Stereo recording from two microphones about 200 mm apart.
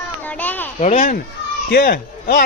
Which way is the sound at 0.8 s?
40° left (ahead or behind).